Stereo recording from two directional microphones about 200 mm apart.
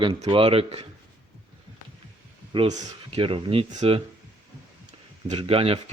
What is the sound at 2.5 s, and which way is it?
Speech, 30° right (ahead or behind).